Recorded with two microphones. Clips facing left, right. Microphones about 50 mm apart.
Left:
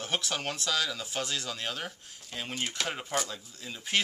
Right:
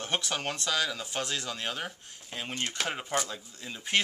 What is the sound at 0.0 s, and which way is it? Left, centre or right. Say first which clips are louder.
Speech: right 1 dB; centre.